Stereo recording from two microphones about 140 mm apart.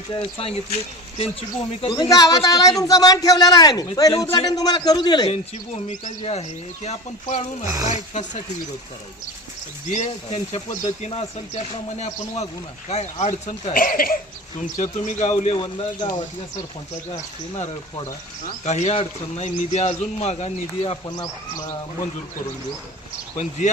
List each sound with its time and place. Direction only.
0.1 s speech: 40° left (ahead or behind)
1.9 s speech: 30° left (ahead or behind)
5.3 s a man's voice: 50° left (ahead or behind)
9.9 s speech: 55° left (ahead or behind)
13.7 s speech: 90° left
14.8 s a man's voice: 55° left (ahead or behind)
15.5 s speech: 35° left (ahead or behind)
18.6 s speech: 55° left (ahead or behind)
23.4 s a man's voice: 55° left (ahead or behind)